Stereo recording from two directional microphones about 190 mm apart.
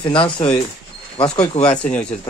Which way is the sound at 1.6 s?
5° left (ahead or behind).